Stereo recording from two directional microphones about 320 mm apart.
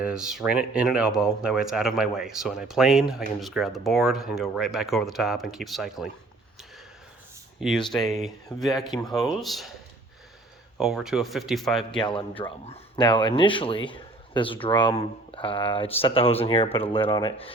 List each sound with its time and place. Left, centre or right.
0.0 s speech: centre
7.9 s speech: centre
10.8 s speech: centre
11.9 s speech: centre